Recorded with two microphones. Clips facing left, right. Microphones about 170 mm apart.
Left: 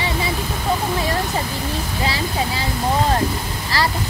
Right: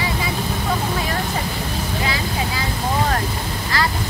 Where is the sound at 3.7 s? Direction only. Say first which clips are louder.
Left 1 dB; 30° left (ahead or behind).